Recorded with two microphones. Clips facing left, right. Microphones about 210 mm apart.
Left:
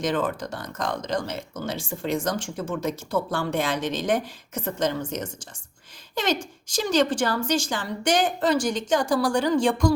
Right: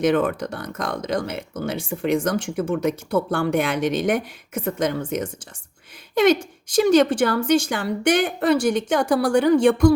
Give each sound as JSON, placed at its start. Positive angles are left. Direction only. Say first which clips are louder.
{"t": 0.0, "sound": "a woman's voice", "louder": "right 6 dB", "side_deg": -65}
{"t": 6.7, "sound": "a woman's voice", "louder": "right 6 dB", "side_deg": -60}